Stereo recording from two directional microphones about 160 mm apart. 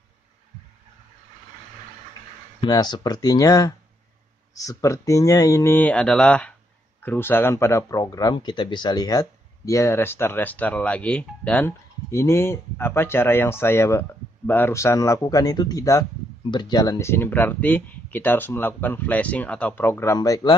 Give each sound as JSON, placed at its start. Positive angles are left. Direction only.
{"t": 2.6, "sound": "speech", "side_deg": 25}